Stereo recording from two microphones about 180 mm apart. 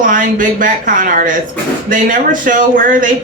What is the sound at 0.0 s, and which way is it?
Speech, 50° right (ahead or behind).